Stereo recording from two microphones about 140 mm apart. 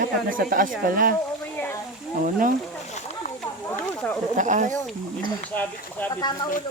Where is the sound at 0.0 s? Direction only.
80° right.